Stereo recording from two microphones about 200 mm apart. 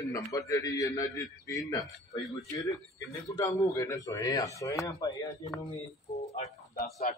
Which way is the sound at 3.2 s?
15° left (ahead or behind).